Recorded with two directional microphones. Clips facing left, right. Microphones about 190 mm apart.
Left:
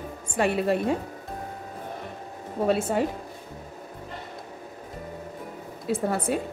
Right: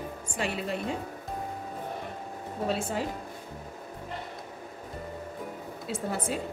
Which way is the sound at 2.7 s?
55° left (ahead or behind).